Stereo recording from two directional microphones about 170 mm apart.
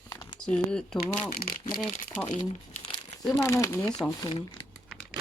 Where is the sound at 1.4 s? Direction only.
60° left (ahead or behind).